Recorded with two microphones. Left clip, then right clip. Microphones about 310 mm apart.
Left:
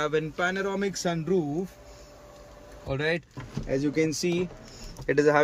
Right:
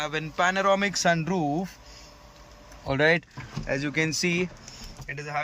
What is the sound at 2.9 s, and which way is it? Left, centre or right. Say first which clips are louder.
Speech: right 6 dB; centre.